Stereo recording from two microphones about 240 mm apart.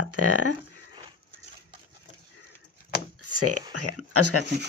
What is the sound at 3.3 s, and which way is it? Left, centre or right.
Speech, right.